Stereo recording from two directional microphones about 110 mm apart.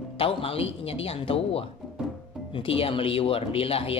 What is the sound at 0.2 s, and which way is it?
Speech, 60° left (ahead or behind).